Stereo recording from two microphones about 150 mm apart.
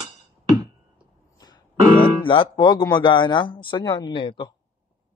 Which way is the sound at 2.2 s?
35° left (ahead or behind).